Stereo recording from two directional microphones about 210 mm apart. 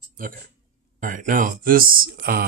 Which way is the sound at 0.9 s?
40° right (ahead or behind).